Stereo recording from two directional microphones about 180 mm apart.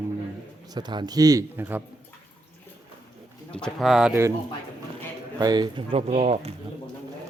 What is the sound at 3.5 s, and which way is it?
Speech, 5° left (ahead or behind).